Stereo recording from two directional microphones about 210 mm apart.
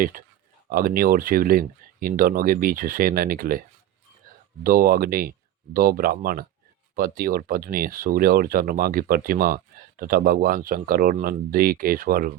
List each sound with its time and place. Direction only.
0.0 s speech: 40° right (ahead or behind)
4.6 s speech: 45° right (ahead or behind)